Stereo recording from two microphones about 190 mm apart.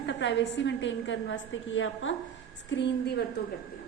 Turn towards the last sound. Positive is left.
turn(degrees=65)  # may be behind; listen again after turning